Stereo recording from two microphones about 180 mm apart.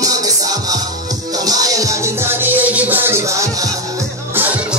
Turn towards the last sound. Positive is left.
turn(degrees=-10)  # may be behind; listen again after turning